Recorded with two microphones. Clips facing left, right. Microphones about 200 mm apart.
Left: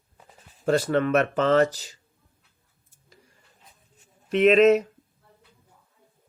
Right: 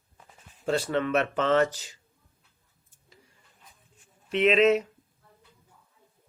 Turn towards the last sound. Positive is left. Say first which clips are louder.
# left 4 dB
turn(degrees=45)  # may be behind; listen again after turning